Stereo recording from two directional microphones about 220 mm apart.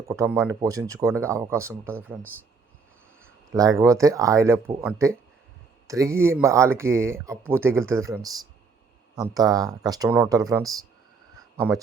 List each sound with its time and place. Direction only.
0.1 s speech: 15° right (ahead or behind)
3.5 s speech: 15° right (ahead or behind)